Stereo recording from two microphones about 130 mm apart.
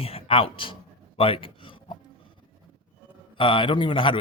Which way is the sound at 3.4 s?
40° left (ahead or behind).